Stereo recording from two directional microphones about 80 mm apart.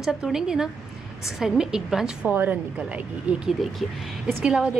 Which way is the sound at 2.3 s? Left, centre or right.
Right.